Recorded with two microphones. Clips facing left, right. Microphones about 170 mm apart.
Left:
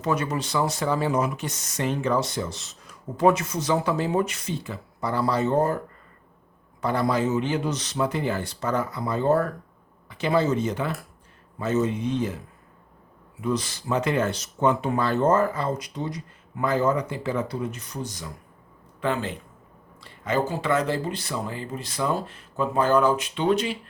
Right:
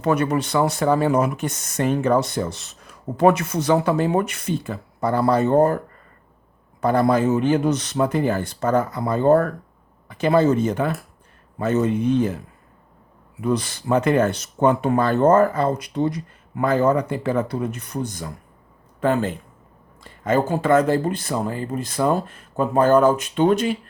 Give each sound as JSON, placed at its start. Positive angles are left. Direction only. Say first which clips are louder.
{"t": 0.0, "sound": "speech", "louder": "right 6 dB", "side_deg": -60}
{"t": 6.8, "sound": "speech", "louder": "right 6 dB", "side_deg": -50}
{"t": 13.4, "sound": "speech", "louder": "right 4 dB", "side_deg": -60}